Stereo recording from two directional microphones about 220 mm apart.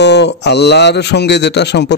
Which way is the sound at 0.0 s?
50° left (ahead or behind).